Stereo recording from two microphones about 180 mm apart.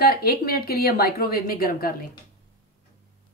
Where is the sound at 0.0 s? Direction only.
55° left (ahead or behind).